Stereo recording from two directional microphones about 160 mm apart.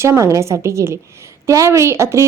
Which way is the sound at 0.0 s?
15° right (ahead or behind).